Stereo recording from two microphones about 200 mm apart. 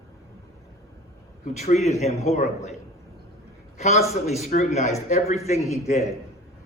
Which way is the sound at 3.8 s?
35° left (ahead or behind).